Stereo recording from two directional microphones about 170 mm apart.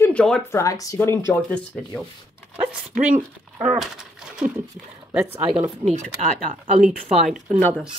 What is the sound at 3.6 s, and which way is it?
Speech, centre (ahead or behind).